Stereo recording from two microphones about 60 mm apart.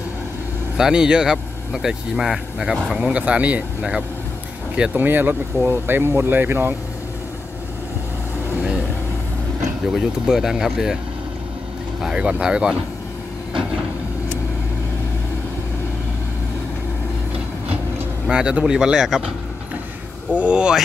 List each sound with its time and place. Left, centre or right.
0.7 s speech: centre
3.0 s speech: right
4.9 s speech: right
9.9 s speech: centre
12.0 s speech: centre
13.5 s a sound: centre
18.3 s speech: centre
20.3 s speech: centre